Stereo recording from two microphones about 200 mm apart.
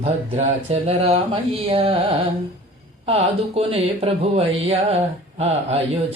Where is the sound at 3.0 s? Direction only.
30° right (ahead or behind).